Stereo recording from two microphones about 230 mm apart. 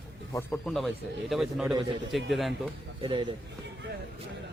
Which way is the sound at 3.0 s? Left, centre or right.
Right.